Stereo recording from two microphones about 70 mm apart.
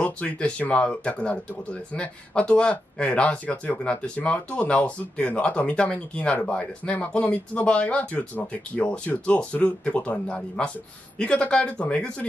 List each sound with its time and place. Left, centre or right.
0.0 s speech: centre